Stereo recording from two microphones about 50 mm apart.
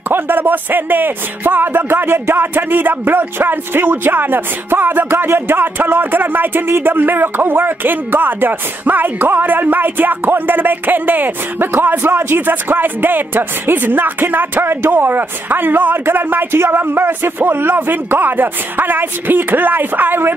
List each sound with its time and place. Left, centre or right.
0.1 s a man's voice: right